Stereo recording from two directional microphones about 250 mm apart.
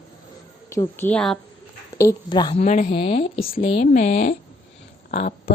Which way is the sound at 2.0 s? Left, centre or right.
Centre.